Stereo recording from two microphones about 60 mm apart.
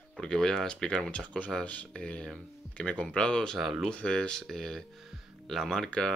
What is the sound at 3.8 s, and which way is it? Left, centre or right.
Speech, centre.